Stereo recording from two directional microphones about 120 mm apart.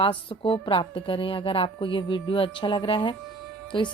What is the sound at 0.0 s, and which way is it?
A woman's voice, 45° left (ahead or behind).